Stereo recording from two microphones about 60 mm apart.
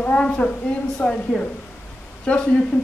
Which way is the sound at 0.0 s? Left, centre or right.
Left.